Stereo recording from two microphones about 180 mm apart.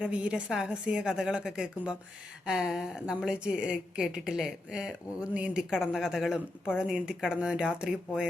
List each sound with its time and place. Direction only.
0.0 s a woman's voice: 5° right (ahead or behind)